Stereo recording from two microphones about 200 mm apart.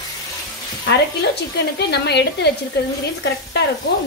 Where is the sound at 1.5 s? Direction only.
55° left (ahead or behind).